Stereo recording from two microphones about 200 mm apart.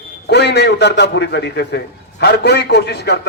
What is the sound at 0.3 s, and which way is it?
A man's voice, 55° left (ahead or behind).